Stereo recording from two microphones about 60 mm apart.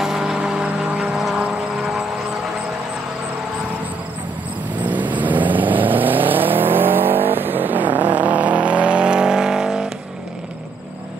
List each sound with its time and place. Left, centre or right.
0.0 s vehicle: centre
4.8 s vehicle: right; by 9.8 s centre